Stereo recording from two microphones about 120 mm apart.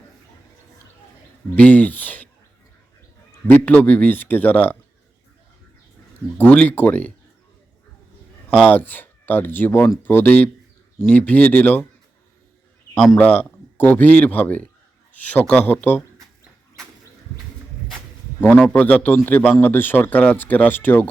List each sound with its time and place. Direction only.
1.5 s speech: 15° left (ahead or behind)
3.4 s a man's voice: 15° left (ahead or behind)
6.3 s a man's voice: 10° left (ahead or behind)
8.6 s a man's voice: 15° left (ahead or behind)
13.1 s a man's voice: 15° left (ahead or behind)
18.6 s a man's voice: 10° left (ahead or behind)